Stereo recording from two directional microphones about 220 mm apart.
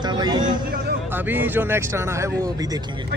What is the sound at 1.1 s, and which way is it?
Speech, 10° right (ahead or behind).